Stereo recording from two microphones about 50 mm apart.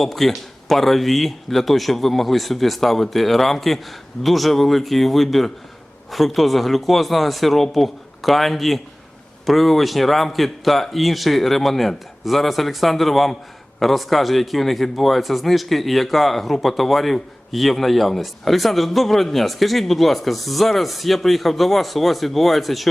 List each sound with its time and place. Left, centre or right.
0.0 s a man's voice: centre